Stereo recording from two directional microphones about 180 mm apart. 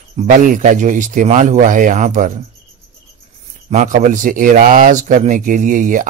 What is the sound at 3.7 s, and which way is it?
Speech, 45° right (ahead or behind).